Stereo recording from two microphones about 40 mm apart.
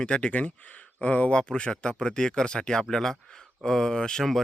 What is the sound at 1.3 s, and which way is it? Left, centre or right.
Speech, left.